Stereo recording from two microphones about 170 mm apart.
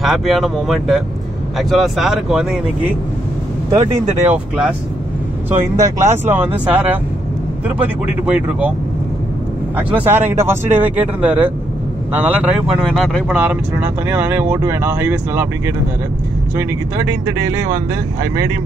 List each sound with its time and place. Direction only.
0.0 s speech: centre (ahead or behind)
4.2 s speech: 10° right (ahead or behind)
5.8 s speech: 15° right (ahead or behind)
9.8 s speech: 10° right (ahead or behind)
13.4 s speech: 10° right (ahead or behind)